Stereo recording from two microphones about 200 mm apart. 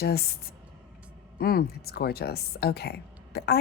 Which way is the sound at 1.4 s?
50° left (ahead or behind).